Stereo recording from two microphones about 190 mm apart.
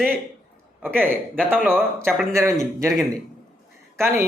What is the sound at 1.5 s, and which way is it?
Speech, 5° left (ahead or behind).